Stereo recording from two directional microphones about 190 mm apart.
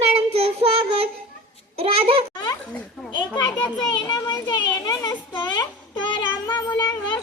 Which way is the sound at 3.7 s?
20° left (ahead or behind).